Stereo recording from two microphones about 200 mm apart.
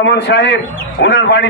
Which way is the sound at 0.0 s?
60° left (ahead or behind).